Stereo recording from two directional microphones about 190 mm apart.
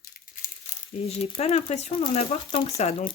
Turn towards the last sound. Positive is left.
turn(degrees=30)  # may be behind; listen again after turning